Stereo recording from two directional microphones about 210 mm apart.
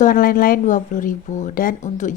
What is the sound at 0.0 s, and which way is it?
A woman's voice, 40° left (ahead or behind).